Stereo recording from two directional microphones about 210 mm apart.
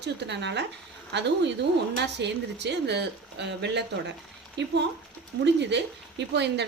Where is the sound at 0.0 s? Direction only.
55° right (ahead or behind).